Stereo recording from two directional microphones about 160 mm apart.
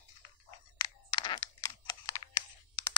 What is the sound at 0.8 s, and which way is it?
Computer keyboard, 25° left (ahead or behind).